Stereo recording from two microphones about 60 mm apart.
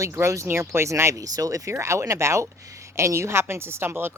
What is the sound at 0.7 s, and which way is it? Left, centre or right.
Speech, right.